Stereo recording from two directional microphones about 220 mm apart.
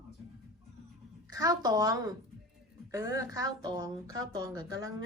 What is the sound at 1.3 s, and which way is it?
Speech, 15° right (ahead or behind).